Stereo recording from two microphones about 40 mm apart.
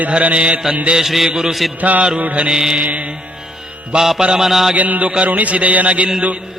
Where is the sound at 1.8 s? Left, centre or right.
Right.